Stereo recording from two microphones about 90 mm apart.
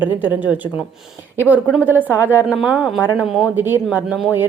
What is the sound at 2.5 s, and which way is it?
Speech, 5° right (ahead or behind).